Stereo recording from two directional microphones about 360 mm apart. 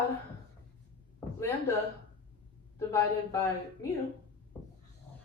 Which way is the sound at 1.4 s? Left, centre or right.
Centre.